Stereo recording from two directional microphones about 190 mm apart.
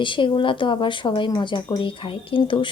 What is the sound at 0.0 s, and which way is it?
Speech, 25° left (ahead or behind).